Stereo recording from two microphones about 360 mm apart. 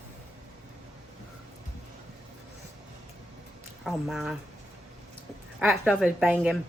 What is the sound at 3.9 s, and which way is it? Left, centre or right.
Speech, centre.